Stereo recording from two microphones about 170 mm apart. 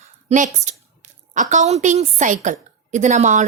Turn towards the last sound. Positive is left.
turn(degrees=-45)  # may be behind; listen again after turning